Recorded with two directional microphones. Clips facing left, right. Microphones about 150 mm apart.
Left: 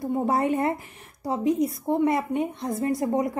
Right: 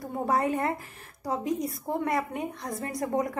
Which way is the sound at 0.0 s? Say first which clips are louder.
Left 3 dB; 25° left (ahead or behind).